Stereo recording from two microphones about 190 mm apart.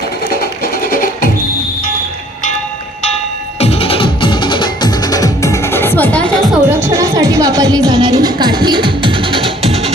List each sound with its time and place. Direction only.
0.6 s music: 50° left (ahead or behind)
3.6 s music: 30° left (ahead or behind); by 6.6 s 5° left (ahead or behind)
6.8 s music: 15° right (ahead or behind); by 9.9 s 35° right (ahead or behind)